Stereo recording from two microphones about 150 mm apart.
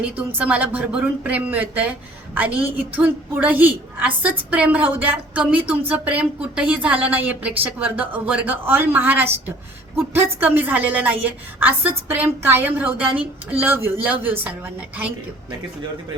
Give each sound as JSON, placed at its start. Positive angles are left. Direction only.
{"t": 0.3, "sound": "a woman's voice", "side_deg": -10}